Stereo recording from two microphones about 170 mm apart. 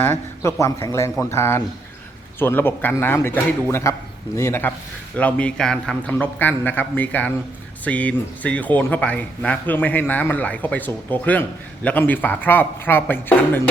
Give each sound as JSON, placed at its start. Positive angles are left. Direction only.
{"t": 0.0, "sound": "speech", "side_deg": 15}